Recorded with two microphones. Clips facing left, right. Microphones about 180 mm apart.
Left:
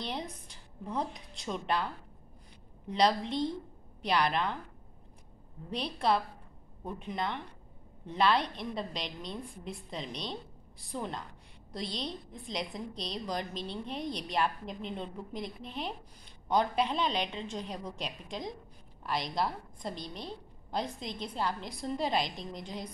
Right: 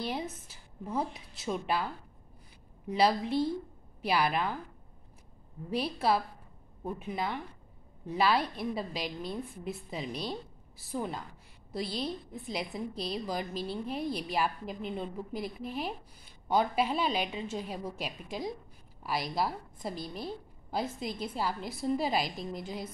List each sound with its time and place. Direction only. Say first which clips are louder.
0.0 s a woman's voice: right 3 dB; 5° right (ahead or behind)
2.9 s a woman's voice: right 1 dB; 5° right (ahead or behind)
5.7 s a woman's voice: right 1 dB; 5° right (ahead or behind)